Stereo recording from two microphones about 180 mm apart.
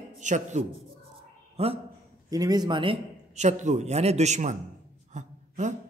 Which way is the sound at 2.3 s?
20° right (ahead or behind).